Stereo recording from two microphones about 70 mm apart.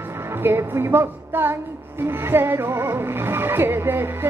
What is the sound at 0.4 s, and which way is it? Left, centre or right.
A woman's voice, right.